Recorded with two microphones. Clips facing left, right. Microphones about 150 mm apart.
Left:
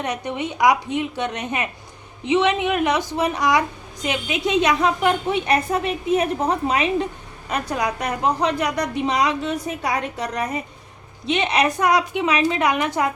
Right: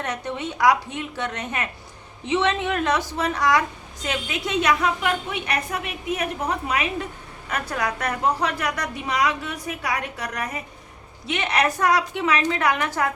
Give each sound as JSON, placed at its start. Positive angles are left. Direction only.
{"t": 0.0, "sound": "a woman's voice", "side_deg": 15}